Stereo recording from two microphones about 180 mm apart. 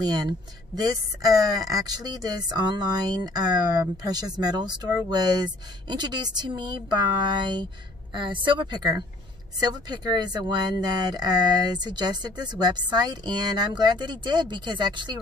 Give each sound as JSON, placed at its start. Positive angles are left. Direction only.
{"t": 0.0, "sound": "a woman's voice", "side_deg": -20}